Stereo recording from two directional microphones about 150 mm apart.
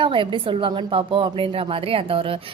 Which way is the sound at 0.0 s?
35° right (ahead or behind).